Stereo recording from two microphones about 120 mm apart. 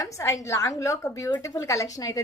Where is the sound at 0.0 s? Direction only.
25° left (ahead or behind).